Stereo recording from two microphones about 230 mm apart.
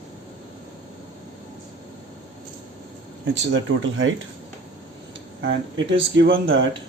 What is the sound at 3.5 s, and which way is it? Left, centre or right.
Speech, right.